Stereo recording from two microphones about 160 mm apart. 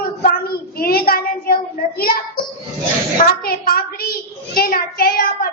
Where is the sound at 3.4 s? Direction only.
70° left (ahead or behind).